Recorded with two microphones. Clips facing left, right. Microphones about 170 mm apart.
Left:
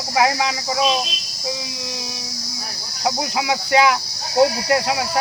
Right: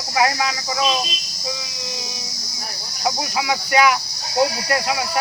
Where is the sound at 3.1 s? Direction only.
20° left (ahead or behind).